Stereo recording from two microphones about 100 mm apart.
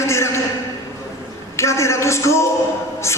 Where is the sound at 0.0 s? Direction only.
30° left (ahead or behind).